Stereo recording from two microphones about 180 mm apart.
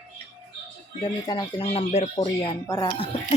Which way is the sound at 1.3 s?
25° left (ahead or behind).